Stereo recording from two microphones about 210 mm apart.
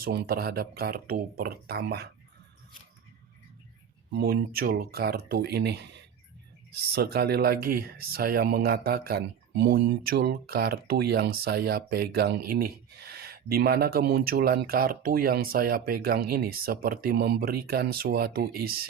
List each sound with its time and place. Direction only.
0.0 s speech: 50° right (ahead or behind)
4.1 s speech: 50° right (ahead or behind)